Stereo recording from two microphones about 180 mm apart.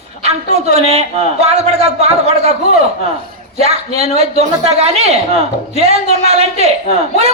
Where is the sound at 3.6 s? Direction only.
35° right (ahead or behind).